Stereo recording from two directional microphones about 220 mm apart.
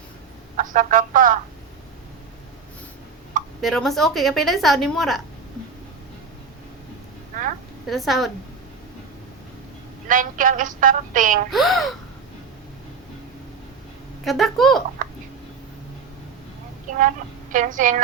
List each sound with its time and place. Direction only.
0.5 s a woman's voice: 35° right (ahead or behind)
3.6 s a woman's voice: centre (ahead or behind)
7.9 s a woman's voice: centre (ahead or behind)
10.1 s a woman's voice: 35° right (ahead or behind)
11.5 s a woman's voice: centre (ahead or behind)
14.3 s a woman's voice: centre (ahead or behind)
15.0 s hiccup: 40° right (ahead or behind)
17.5 s a woman's voice: 35° right (ahead or behind)